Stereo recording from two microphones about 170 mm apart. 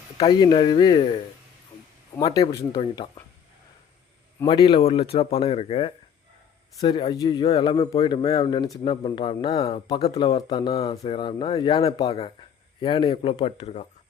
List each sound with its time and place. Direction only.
0.2 s speech: 25° left (ahead or behind)
2.1 s speech: 20° left (ahead or behind)
4.4 s speech: 25° left (ahead or behind)